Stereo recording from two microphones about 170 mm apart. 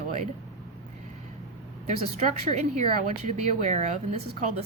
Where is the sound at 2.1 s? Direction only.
40° right (ahead or behind).